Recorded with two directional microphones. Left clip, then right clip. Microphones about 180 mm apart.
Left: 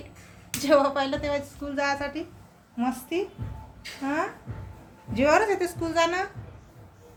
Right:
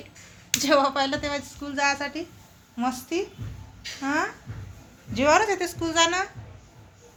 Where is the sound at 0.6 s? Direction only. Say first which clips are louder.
Even; 30° right (ahead or behind).